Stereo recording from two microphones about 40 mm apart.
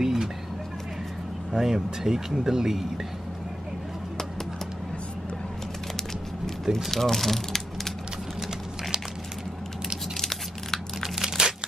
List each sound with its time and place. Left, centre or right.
0.0 s a sound: centre
1.5 s speech: centre
6.7 s speech: centre
10.1 s tearing: centre
11.0 s crumpling: centre